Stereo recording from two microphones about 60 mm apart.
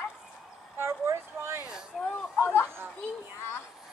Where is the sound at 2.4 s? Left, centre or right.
Left.